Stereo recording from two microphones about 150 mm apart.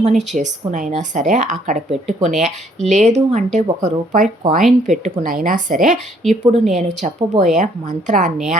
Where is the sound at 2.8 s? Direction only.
50° right (ahead or behind).